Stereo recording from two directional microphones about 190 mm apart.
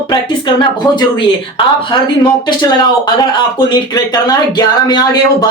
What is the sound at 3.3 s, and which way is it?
Speech, 20° left (ahead or behind).